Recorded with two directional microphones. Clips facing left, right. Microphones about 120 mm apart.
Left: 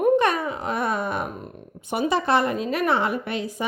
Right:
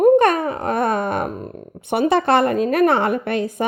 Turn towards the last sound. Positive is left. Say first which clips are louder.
# right 6 dB
turn(degrees=-55)  # may be behind; listen again after turning